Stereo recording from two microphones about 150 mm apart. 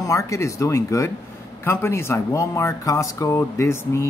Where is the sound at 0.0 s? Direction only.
20° left (ahead or behind).